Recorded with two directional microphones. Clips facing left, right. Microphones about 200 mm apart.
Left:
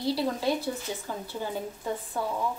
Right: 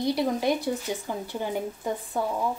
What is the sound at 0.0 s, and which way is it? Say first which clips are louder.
Speech: right 3 dB; 15° right (ahead or behind).